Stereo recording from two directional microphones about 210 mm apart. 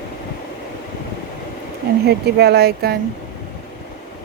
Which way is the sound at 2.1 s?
50° right (ahead or behind).